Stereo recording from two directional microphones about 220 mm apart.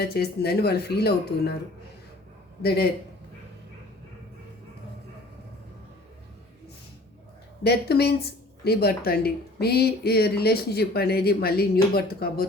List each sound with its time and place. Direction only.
0.0 s speech: 45° left (ahead or behind)
2.6 s speech: 45° left (ahead or behind)
7.6 s speech: 45° left (ahead or behind)